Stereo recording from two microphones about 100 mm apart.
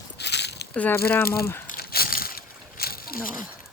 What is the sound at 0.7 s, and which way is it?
Speech, 20° left (ahead or behind).